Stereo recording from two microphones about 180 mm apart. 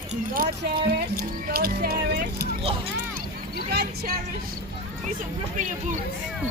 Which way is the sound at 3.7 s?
60° right (ahead or behind).